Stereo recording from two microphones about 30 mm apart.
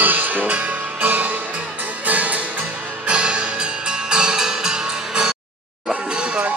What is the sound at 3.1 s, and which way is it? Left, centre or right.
Music, right.